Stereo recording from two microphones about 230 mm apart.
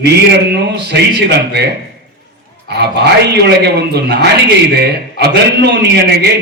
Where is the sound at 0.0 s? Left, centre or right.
Right.